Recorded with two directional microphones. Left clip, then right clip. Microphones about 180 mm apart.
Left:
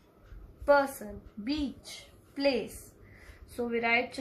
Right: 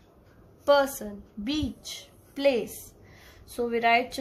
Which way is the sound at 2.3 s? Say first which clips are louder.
Right 5 dB; 40° right (ahead or behind).